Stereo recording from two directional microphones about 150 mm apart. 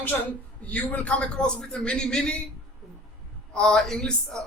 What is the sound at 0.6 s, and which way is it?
A man's voice, 10° left (ahead or behind).